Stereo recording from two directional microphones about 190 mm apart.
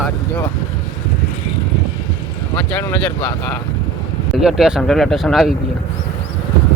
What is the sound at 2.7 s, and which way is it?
Speech, 5° left (ahead or behind).